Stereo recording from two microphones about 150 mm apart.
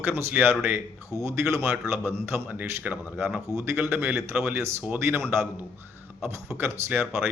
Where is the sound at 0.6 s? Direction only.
15° right (ahead or behind).